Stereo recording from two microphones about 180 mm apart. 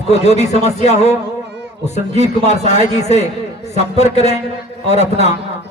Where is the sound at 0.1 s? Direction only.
40° left (ahead or behind).